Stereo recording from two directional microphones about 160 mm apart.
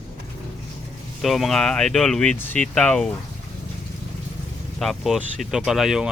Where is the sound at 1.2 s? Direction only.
Centre (ahead or behind).